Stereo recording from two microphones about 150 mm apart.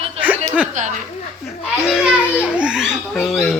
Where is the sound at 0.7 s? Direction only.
55° right (ahead or behind).